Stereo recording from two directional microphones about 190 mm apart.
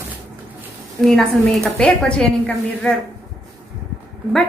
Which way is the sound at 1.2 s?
Centre (ahead or behind).